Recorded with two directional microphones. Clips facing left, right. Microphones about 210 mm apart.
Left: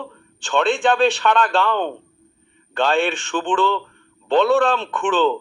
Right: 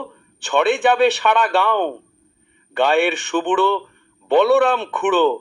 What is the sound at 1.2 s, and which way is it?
A man's voice, 15° right (ahead or behind).